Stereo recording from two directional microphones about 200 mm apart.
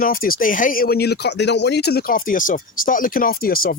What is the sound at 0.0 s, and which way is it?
Speech, 45° left (ahead or behind).